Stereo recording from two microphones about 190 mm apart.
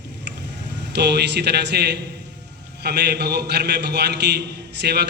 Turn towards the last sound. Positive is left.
turn(degrees=-60)  # may be behind; listen again after turning